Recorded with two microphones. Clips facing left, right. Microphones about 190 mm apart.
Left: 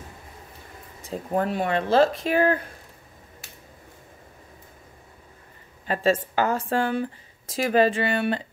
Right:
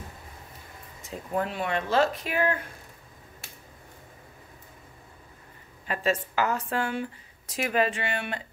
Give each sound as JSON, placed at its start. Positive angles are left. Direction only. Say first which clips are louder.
{"t": 1.0, "sound": "speech", "louder": "left 4 dB", "side_deg": 35}
{"t": 6.3, "sound": "speech", "louder": "left 4 dB", "side_deg": 30}